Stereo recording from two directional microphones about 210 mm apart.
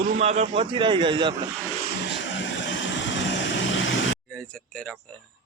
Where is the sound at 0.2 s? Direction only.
30° right (ahead or behind).